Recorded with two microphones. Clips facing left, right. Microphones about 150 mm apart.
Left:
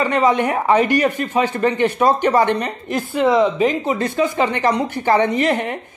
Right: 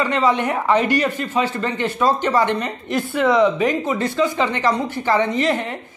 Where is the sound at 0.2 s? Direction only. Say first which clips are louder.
Left 2 dB; 15° left (ahead or behind).